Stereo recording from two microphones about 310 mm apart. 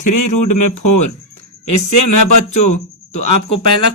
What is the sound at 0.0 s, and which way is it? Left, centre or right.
A man's voice, left.